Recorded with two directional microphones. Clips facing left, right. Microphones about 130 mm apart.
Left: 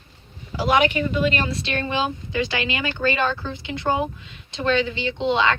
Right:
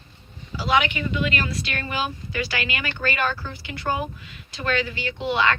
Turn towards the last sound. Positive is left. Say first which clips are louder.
# left 2 dB
turn(degrees=20)  # may be behind; listen again after turning